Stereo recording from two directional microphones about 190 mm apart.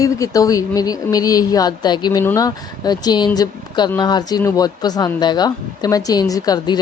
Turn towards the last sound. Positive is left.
turn(degrees=20)  # may be behind; listen again after turning